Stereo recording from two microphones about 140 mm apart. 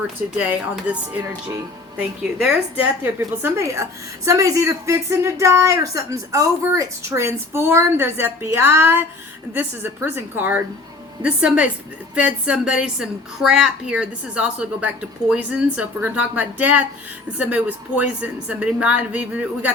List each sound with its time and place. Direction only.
0.3 s a woman's voice: 10° right (ahead or behind)
2.0 s speech: 5° right (ahead or behind)
3.0 s a woman's voice: 20° right (ahead or behind)